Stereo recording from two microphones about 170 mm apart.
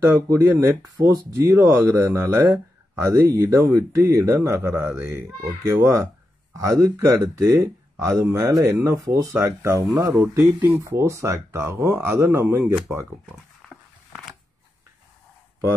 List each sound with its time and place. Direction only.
0.0 s speech: 15° right (ahead or behind)